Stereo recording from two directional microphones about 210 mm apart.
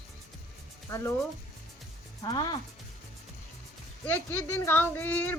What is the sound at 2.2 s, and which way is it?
Speech, 20° left (ahead or behind).